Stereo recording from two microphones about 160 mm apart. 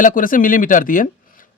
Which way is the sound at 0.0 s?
55° left (ahead or behind).